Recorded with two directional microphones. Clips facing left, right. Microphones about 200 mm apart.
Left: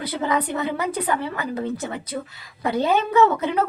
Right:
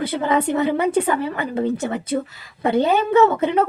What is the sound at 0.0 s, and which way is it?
A woman's voice, 25° right (ahead or behind).